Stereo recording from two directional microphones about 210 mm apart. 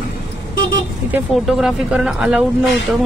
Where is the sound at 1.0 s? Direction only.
5° right (ahead or behind).